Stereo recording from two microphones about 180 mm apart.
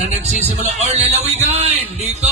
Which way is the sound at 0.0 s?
40° right (ahead or behind).